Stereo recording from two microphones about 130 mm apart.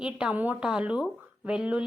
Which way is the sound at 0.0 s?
10° right (ahead or behind).